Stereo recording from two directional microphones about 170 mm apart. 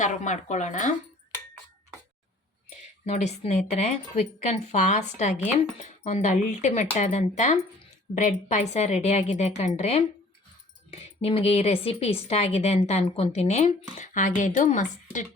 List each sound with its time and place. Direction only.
0.0 s speech: 45° left (ahead or behind)
2.6 s speech: 40° left (ahead or behind)